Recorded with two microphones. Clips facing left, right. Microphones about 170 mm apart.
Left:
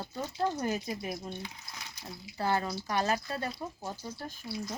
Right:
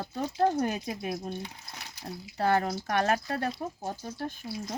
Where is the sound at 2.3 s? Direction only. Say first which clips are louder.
Right 4 dB; 65° right (ahead or behind).